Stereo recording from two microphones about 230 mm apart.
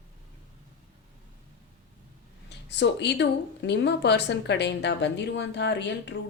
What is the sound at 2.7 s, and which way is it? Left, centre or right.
Speech, left.